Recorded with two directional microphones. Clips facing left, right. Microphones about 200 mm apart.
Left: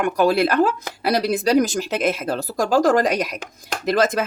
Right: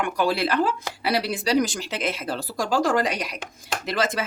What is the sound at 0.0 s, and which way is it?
Speech, 45° left (ahead or behind).